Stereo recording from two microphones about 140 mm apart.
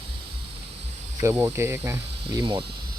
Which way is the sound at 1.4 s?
20° right (ahead or behind).